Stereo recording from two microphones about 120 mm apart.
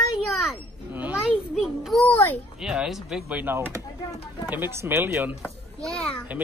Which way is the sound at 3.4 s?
15° right (ahead or behind).